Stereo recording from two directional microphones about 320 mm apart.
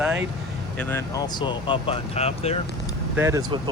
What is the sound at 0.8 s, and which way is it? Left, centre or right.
Speech, centre.